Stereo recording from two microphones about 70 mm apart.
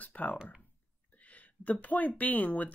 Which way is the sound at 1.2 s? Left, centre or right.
Left.